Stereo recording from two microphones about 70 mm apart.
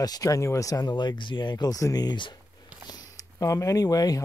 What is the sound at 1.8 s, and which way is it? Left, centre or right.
Speech, left.